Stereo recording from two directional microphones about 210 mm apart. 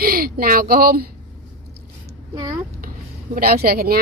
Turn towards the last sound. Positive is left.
turn(degrees=-45)  # may be behind; listen again after turning